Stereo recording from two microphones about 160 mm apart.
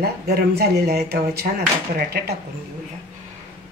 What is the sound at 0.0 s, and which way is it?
Speech, 75° right (ahead or behind).